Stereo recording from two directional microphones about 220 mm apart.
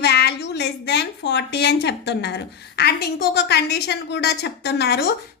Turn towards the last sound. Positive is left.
turn(degrees=50)  # may be behind; listen again after turning